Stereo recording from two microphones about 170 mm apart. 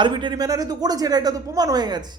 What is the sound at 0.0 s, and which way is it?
Speech, 30° right (ahead or behind).